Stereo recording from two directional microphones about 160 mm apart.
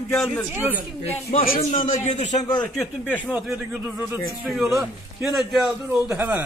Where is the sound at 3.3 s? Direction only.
10° right (ahead or behind).